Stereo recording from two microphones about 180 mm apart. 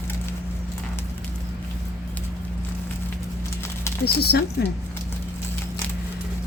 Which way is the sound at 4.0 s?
65° left (ahead or behind).